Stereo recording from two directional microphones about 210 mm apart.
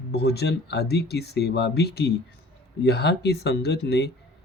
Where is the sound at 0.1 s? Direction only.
50° left (ahead or behind).